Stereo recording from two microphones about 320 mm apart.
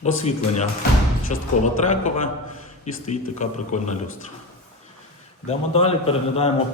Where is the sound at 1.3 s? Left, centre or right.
Left.